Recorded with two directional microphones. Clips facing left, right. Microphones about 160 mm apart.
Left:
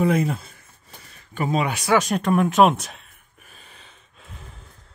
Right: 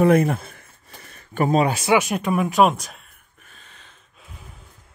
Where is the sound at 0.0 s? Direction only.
55° right (ahead or behind).